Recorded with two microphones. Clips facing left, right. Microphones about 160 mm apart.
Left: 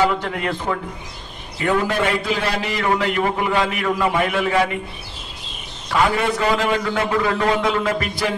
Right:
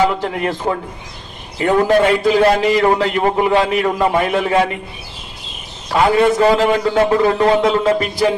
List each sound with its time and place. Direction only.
0.2 s a man's voice: 30° right (ahead or behind)
5.9 s a man's voice: 35° right (ahead or behind)